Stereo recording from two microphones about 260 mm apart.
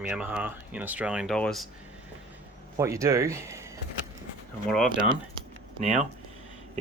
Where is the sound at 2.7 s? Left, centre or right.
Centre.